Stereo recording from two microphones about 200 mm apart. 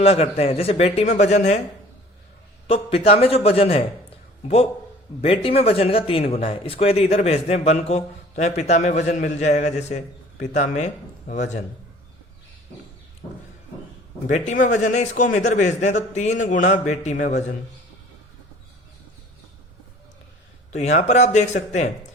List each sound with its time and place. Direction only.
0.0 s speech: 30° left (ahead or behind)
2.6 s a man's voice: 30° left (ahead or behind)
14.3 s speech: 35° left (ahead or behind)
17.2 s a man's voice: 50° left (ahead or behind)
20.7 s speech: 35° left (ahead or behind)